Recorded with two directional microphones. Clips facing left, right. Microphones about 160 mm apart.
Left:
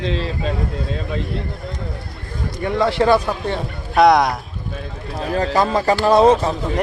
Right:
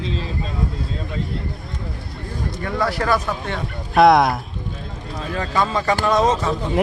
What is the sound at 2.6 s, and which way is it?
Speech, 25° left (ahead or behind).